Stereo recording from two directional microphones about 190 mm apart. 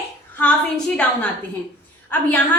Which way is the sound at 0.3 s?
5° left (ahead or behind).